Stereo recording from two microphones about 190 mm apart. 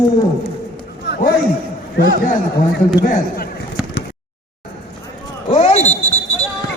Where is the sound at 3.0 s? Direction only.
50° left (ahead or behind).